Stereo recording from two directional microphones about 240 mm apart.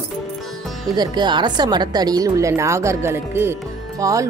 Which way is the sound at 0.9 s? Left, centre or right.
Centre.